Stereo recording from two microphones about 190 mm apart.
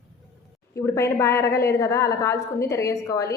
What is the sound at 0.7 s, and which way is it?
A woman's voice, 15° left (ahead or behind).